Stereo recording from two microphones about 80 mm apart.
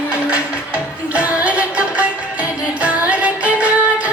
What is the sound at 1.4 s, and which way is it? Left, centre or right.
Music, centre.